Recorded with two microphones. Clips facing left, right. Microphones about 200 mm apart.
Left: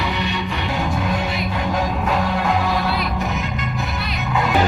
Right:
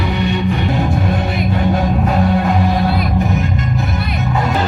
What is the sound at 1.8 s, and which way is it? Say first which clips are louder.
Music: right 5 dB; 40° right (ahead or behind).